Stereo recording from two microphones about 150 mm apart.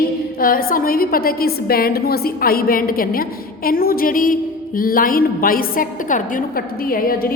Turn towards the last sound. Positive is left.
turn(degrees=75)  # may be behind; listen again after turning